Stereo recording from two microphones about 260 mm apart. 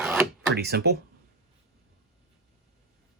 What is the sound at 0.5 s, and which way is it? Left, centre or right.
Speech, right.